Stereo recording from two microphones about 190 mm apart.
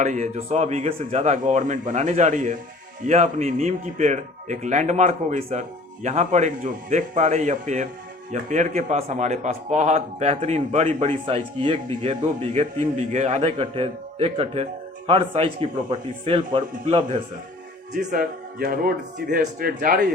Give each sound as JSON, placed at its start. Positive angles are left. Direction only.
{"t": 0.0, "sound": "a man's voice", "side_deg": -40}
{"t": 18.1, "sound": "speech", "side_deg": -50}